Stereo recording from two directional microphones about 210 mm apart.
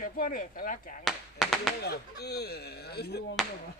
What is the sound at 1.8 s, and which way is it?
Speech, 50° left (ahead or behind).